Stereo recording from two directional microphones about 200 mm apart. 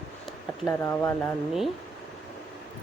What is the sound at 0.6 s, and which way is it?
Speech, 10° left (ahead or behind).